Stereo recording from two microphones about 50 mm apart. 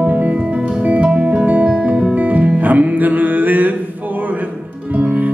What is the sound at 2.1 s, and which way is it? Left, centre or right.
Music, right.